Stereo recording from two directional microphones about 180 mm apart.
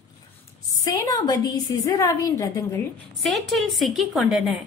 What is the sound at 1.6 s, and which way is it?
Speech, 20° left (ahead or behind).